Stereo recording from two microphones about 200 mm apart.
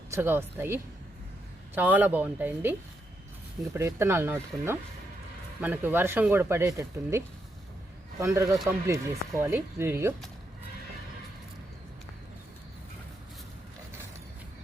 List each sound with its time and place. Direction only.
0.1 s speech: 10° right (ahead or behind)
3.8 s speech: 15° right (ahead or behind)
8.2 s speech: 15° right (ahead or behind)